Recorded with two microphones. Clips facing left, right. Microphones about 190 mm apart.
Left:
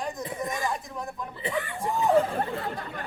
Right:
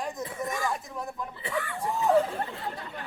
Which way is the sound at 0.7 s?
5° right (ahead or behind).